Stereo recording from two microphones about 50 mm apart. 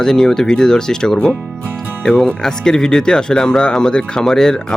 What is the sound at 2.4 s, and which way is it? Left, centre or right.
Speech, centre.